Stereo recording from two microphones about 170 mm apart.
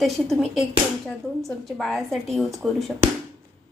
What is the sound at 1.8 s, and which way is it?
Speech, centre (ahead or behind).